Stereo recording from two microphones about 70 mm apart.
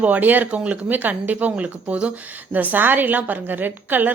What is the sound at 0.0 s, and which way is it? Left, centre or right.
Speech, right.